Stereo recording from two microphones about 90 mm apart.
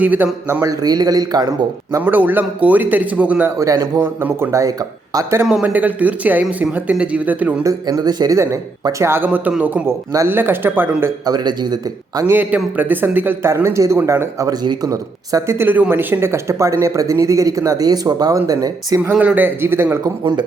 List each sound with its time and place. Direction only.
0.0 s speech: 20° right (ahead or behind)
0.6 s a man's voice: 45° right (ahead or behind)
2.0 s speech: 20° right (ahead or behind)
3.6 s speech: 35° right (ahead or behind)
5.6 s speech: 15° right (ahead or behind)
7.6 s a man's voice: 40° right (ahead or behind)
8.4 s speech: 35° right (ahead or behind); by 9.8 s 15° right (ahead or behind)
10.2 s speech: 25° right (ahead or behind)
11.3 s a man's voice: 50° right (ahead or behind)
12.2 s speech: 20° right (ahead or behind)
14.6 s speech: 55° right (ahead or behind)
14.8 s speech: 40° right (ahead or behind)
15.5 s speech: 20° right (ahead or behind); by 18.9 s 40° right (ahead or behind)
19.1 s speech: 15° right (ahead or behind)